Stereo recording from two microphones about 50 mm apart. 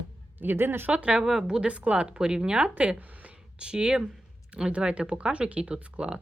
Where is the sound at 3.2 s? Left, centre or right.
Centre.